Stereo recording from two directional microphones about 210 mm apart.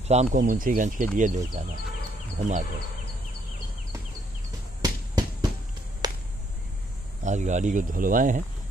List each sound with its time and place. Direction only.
0.1 s speech: 35° right (ahead or behind)
4.8 s a sound: 20° right (ahead or behind)
7.2 s speech: 35° right (ahead or behind)